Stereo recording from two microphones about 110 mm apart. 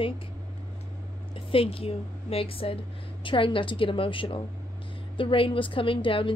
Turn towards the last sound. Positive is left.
turn(degrees=50)  # may be behind; listen again after turning